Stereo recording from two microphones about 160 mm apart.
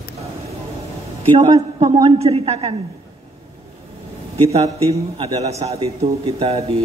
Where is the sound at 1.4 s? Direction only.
35° right (ahead or behind).